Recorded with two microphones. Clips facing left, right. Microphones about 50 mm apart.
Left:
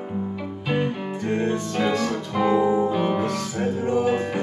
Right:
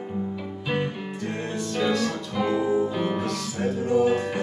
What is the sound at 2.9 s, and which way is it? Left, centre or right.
Music, centre.